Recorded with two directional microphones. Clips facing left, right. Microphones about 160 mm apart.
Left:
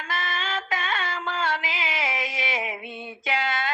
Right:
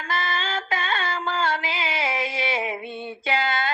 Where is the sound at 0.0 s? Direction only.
30° right (ahead or behind).